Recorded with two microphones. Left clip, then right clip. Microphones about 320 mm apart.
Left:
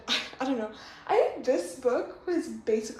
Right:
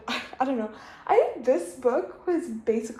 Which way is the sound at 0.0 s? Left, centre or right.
Centre.